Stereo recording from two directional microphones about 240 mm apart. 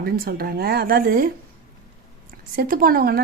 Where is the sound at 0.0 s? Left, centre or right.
Right.